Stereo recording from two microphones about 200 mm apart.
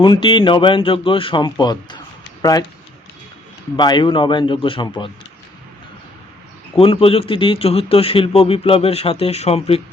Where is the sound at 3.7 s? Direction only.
20° left (ahead or behind).